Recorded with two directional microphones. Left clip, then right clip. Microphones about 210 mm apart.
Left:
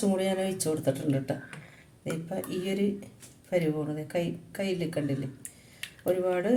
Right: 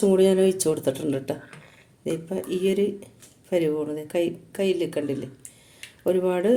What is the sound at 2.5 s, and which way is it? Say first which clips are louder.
Speech: right 9 dB; 40° right (ahead or behind).